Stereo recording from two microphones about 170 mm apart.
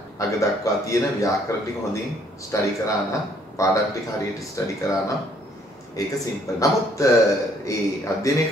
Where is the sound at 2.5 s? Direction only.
20° left (ahead or behind).